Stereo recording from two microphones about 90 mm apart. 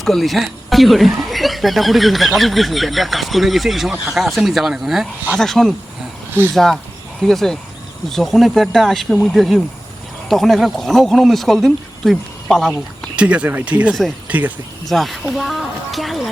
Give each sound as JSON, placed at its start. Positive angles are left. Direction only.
{"t": 0.0, "sound": "speech", "side_deg": 0}
{"t": 13.1, "sound": "speech", "side_deg": -15}
{"t": 14.8, "sound": "speech", "side_deg": 0}